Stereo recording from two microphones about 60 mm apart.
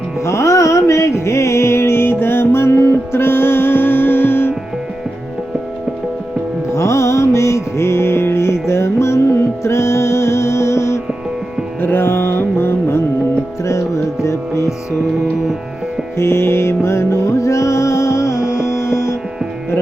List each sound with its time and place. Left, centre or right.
0.3 s music: left
6.7 s music: left
11.8 s music: left
13.7 s music: left
16.1 s music: left